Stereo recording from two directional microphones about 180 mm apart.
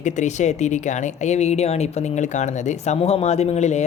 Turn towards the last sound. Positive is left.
turn(degrees=40)  # may be behind; listen again after turning